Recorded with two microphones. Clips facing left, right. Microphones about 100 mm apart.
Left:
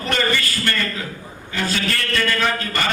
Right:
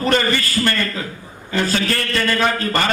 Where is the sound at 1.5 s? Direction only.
35° right (ahead or behind).